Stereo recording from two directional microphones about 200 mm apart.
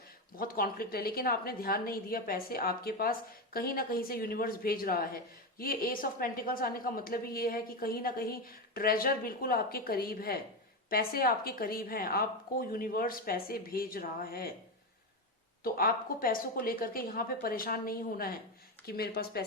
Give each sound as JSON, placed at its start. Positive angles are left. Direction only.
{"t": 0.3, "sound": "a woman's voice", "side_deg": 45}
{"t": 15.6, "sound": "a woman's voice", "side_deg": 45}